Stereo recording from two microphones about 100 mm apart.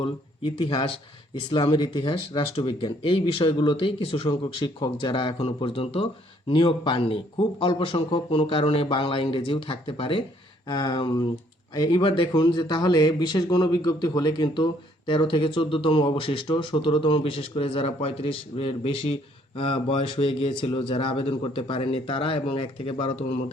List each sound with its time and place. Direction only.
0.0 s speech: 60° left (ahead or behind)
1.7 s speech: 50° left (ahead or behind); by 6.1 s 75° left (ahead or behind)
6.5 s speech: 55° left (ahead or behind)
10.7 s a man's voice: 45° left (ahead or behind)
12.0 s a man's voice: 55° left (ahead or behind); by 19.1 s 75° left (ahead or behind)
19.5 s speech: 65° left (ahead or behind)